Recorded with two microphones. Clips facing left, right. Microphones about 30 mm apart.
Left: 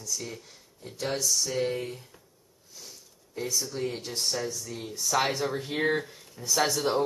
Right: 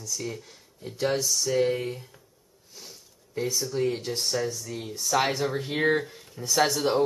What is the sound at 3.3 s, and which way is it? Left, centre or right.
Speech, centre.